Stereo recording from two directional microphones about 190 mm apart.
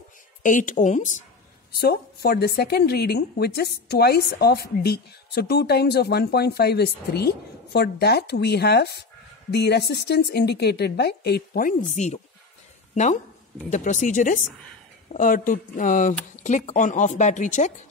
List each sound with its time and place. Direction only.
0.4 s speech: 45° left (ahead or behind)
1.7 s a woman's voice: 55° left (ahead or behind); by 17.7 s 40° left (ahead or behind)